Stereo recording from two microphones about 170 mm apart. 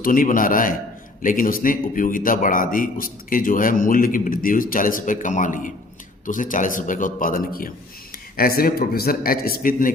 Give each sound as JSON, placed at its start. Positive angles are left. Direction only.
{"t": 0.0, "sound": "a man's voice", "side_deg": 55}